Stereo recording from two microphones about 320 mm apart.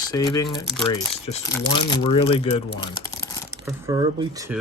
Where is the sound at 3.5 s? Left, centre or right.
Centre.